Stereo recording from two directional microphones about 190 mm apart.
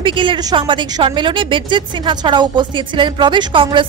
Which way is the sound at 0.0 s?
25° right (ahead or behind).